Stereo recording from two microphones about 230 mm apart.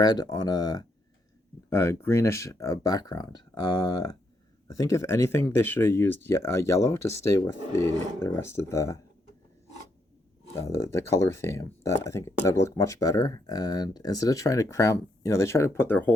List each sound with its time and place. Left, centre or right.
0.0 s speech: centre
10.5 s speech: centre